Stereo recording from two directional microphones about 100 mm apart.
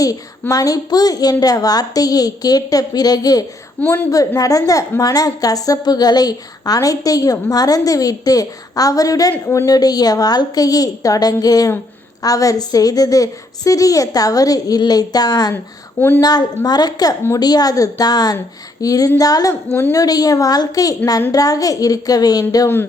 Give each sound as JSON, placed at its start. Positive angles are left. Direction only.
{"t": 0.5, "sound": "a woman's voice", "side_deg": 35}
{"t": 3.8, "sound": "a woman's voice", "side_deg": 20}
{"t": 4.4, "sound": "a woman's voice", "side_deg": 35}
{"t": 9.3, "sound": "a woman's voice", "side_deg": 25}
{"t": 9.6, "sound": "a woman's voice", "side_deg": 40}
{"t": 16.0, "sound": "a woman's voice", "side_deg": 20}
{"t": 16.2, "sound": "a woman's voice", "side_deg": 40}